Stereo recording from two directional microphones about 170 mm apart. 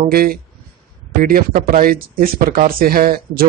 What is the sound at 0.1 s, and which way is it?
Speech, 60° right (ahead or behind).